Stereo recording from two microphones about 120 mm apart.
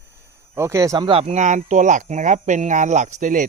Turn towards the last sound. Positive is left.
turn(degrees=-90)